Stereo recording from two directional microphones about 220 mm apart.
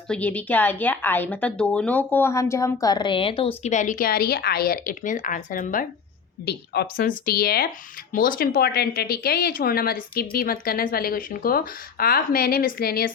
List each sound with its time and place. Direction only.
0.1 s speech: 5° left (ahead or behind); by 13.1 s 45° left (ahead or behind)